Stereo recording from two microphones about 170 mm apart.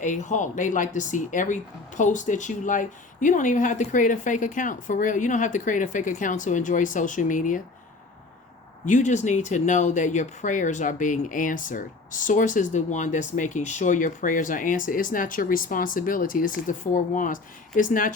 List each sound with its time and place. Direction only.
0.0 s speech: 45° left (ahead or behind)
8.9 s speech: 45° left (ahead or behind)